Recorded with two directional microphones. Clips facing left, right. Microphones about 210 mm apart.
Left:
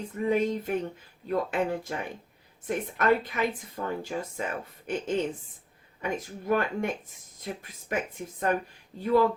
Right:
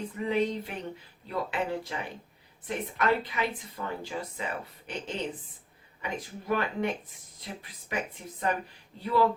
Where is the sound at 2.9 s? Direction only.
45° left (ahead or behind).